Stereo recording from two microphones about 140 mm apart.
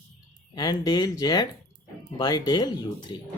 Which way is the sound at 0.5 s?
30° left (ahead or behind).